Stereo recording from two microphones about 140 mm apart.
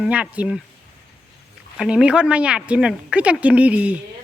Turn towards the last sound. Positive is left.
turn(degrees=-10)  # may be behind; listen again after turning